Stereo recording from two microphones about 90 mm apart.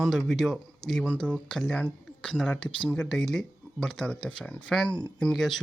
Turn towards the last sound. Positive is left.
turn(degrees=0)  # may be behind; listen again after turning